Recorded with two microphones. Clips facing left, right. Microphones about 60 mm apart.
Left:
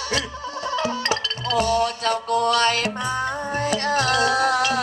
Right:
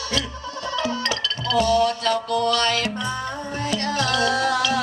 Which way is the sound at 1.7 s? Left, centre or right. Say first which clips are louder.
Right 2 dB; left.